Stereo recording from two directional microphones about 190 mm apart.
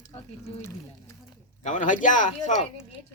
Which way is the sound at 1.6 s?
40° left (ahead or behind).